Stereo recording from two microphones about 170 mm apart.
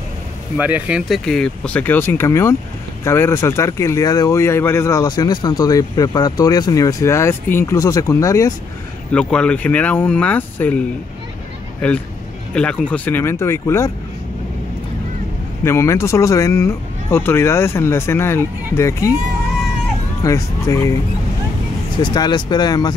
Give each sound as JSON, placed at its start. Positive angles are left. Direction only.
{"t": 0.6, "sound": "speech", "side_deg": -10}
{"t": 9.1, "sound": "speech", "side_deg": 5}
{"t": 15.6, "sound": "speech", "side_deg": 15}
{"t": 20.2, "sound": "speech", "side_deg": 15}
{"t": 22.0, "sound": "speech", "side_deg": 25}